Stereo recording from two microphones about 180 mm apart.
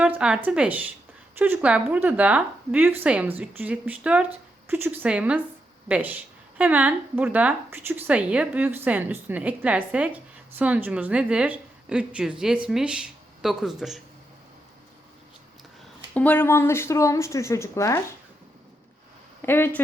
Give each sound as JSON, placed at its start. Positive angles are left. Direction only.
{"t": 0.0, "sound": "speech", "side_deg": -5}
{"t": 16.1, "sound": "speech", "side_deg": 10}
{"t": 19.4, "sound": "speech", "side_deg": 10}